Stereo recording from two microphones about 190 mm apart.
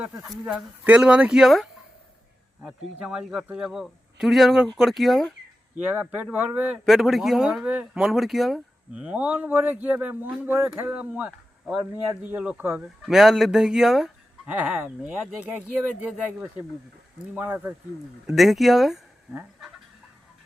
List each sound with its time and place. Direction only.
0.3 s speech: 5° right (ahead or behind)
2.6 s speech: 5° right (ahead or behind)
18.3 s speech: centre (ahead or behind)